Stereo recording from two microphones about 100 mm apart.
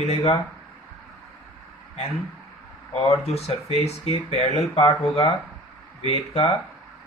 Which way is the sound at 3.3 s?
90° left.